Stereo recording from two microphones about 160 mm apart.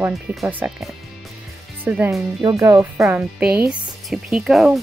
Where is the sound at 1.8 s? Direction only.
15° right (ahead or behind).